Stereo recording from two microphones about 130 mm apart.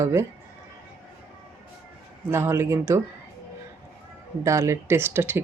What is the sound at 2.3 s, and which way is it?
Speech, 20° right (ahead or behind).